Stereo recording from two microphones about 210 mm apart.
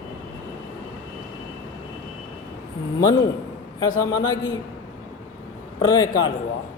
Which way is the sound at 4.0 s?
15° left (ahead or behind).